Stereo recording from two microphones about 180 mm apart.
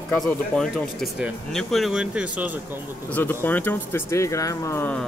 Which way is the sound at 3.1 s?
10° left (ahead or behind).